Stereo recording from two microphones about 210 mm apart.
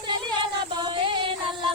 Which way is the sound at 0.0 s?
20° right (ahead or behind).